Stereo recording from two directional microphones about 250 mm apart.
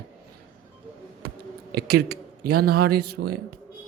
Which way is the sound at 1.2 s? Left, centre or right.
Right.